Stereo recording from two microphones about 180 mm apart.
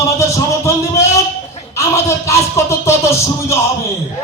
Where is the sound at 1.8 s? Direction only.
15° left (ahead or behind).